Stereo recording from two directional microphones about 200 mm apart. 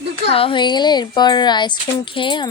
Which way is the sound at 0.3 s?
30° left (ahead or behind).